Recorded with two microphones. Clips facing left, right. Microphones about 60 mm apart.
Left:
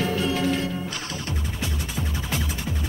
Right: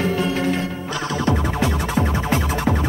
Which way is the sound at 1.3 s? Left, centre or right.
Right.